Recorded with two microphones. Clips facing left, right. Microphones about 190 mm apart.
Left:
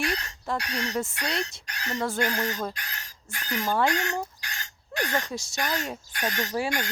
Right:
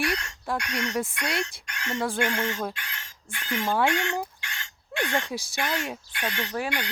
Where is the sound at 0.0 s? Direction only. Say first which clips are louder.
Right 1 dB; 35° left (ahead or behind).